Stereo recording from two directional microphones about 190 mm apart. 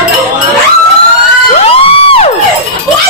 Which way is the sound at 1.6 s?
30° left (ahead or behind).